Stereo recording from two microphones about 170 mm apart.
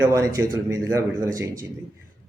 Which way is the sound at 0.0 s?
20° right (ahead or behind).